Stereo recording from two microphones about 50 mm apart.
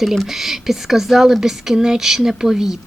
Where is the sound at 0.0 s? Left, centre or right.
Centre.